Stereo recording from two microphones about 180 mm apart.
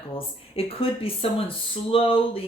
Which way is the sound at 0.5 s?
30° left (ahead or behind).